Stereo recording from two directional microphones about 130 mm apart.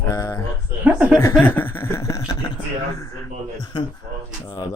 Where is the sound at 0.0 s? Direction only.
25° left (ahead or behind).